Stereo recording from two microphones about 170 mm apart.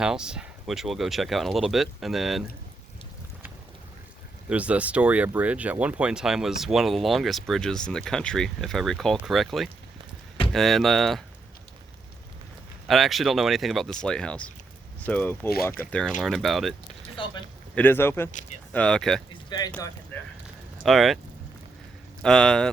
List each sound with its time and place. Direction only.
0.0 s speech: 5° right (ahead or behind)
4.4 s speech: 10° right (ahead or behind)
12.9 s speech: centre (ahead or behind)
17.2 s speech: 30° left (ahead or behind)
17.7 s speech: 10° left (ahead or behind)
19.3 s speech: 25° left (ahead or behind)
20.8 s speech: centre (ahead or behind)
22.2 s speech: 5° left (ahead or behind)